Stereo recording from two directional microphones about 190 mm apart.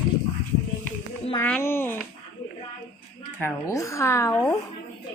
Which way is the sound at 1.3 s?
10° left (ahead or behind).